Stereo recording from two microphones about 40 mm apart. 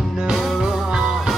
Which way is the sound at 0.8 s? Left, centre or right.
Centre.